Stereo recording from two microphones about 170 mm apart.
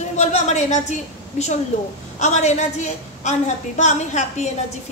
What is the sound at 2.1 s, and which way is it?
A woman's voice, 45° left (ahead or behind).